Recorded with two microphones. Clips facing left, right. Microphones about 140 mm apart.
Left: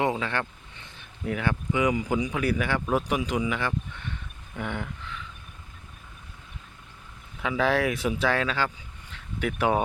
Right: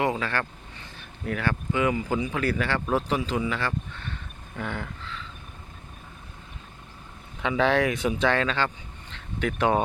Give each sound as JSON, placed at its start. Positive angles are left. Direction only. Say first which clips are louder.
{"t": 0.0, "sound": "speech", "louder": "even", "side_deg": 20}
{"t": 7.4, "sound": "speech", "louder": "right 2 dB", "side_deg": 5}